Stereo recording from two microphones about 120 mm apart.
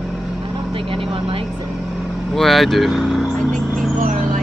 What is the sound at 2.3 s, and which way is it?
Speech, centre (ahead or behind).